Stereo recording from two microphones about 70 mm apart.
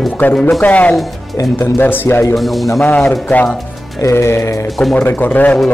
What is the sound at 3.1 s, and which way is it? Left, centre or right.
Speech, left.